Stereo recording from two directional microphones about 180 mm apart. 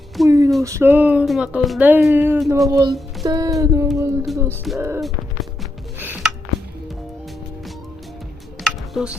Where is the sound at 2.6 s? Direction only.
20° right (ahead or behind).